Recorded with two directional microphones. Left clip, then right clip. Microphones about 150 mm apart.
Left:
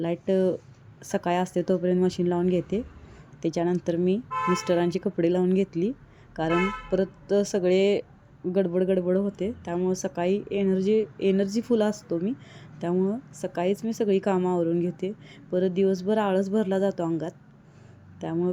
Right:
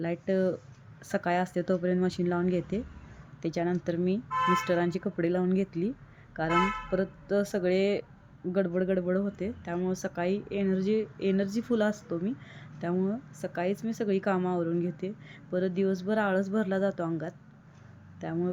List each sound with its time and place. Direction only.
0.0 s speech: 20° left (ahead or behind)